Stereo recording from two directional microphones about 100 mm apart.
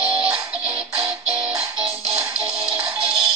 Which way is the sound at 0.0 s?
10° right (ahead or behind).